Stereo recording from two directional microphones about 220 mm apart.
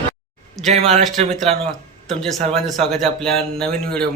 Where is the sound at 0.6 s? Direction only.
30° right (ahead or behind).